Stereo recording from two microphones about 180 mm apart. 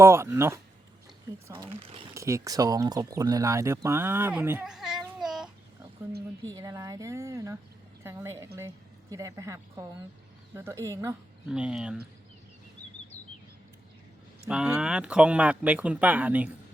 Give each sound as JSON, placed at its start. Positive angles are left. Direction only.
{"t": 0.0, "sound": "speech", "side_deg": -15}
{"t": 2.1, "sound": "speech", "side_deg": -15}
{"t": 6.4, "sound": "a woman's voice", "side_deg": -20}
{"t": 11.4, "sound": "speech", "side_deg": -5}
{"t": 14.5, "sound": "speech", "side_deg": -5}